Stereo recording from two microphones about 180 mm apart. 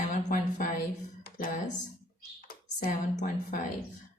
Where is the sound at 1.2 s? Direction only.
50° left (ahead or behind).